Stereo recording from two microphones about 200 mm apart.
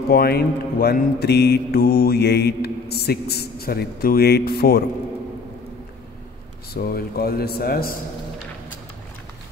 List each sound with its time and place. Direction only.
0.1 s mantra: 50° left (ahead or behind)
6.7 s mantra: 50° left (ahead or behind)